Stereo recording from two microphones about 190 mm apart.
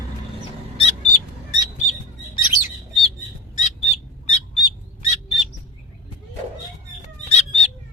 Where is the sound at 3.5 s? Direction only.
40° left (ahead or behind).